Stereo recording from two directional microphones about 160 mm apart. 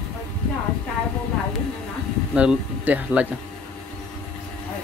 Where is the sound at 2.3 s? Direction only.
5° right (ahead or behind).